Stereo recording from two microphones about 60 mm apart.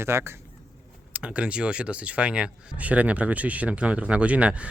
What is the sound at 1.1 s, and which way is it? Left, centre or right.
Speech, right.